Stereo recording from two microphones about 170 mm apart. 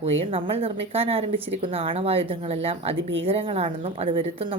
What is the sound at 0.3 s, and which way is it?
A woman's voice, 35° right (ahead or behind).